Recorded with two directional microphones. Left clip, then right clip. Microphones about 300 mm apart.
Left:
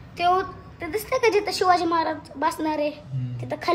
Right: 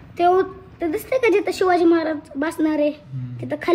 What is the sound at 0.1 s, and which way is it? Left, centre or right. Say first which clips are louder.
A woman's voice: right 4 dB; centre.